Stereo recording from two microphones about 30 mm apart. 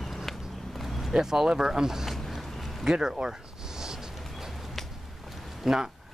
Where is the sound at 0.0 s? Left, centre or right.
Centre.